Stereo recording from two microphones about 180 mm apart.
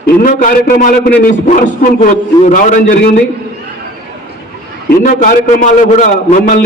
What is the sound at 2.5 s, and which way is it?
Speech, 45° left (ahead or behind).